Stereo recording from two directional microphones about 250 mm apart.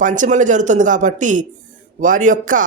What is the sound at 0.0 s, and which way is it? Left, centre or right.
Speech, right.